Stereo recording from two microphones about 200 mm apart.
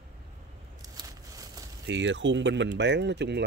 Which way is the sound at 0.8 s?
20° right (ahead or behind).